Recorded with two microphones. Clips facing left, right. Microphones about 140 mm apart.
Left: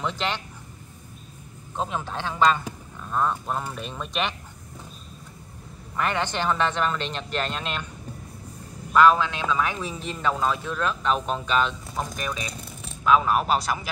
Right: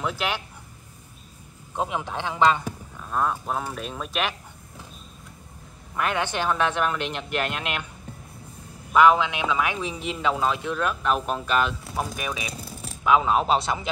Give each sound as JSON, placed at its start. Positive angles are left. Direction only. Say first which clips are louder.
{"t": 0.0, "sound": "a man's voice", "louder": "right 1 dB", "side_deg": -10}
{"t": 1.8, "sound": "a man's voice", "louder": "right 1 dB", "side_deg": -15}
{"t": 3.0, "sound": "speech", "louder": "even", "side_deg": -5}
{"t": 5.9, "sound": "a man's voice", "louder": "even", "side_deg": -10}
{"t": 8.9, "sound": "a man's voice", "louder": "even", "side_deg": -15}
{"t": 13.0, "sound": "speech", "louder": "even", "side_deg": -15}